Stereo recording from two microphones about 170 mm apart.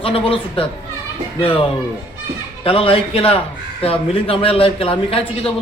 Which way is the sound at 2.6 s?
35° left (ahead or behind).